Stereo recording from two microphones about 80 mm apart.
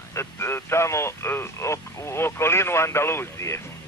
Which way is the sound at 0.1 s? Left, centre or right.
Left.